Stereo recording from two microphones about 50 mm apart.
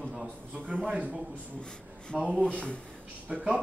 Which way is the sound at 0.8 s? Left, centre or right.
Right.